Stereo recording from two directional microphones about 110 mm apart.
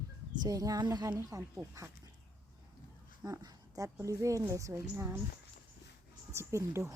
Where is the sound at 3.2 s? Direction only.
35° right (ahead or behind).